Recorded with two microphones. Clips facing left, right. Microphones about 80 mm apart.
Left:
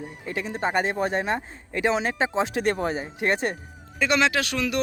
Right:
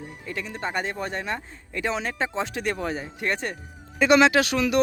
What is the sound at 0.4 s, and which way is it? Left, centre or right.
Speech, left.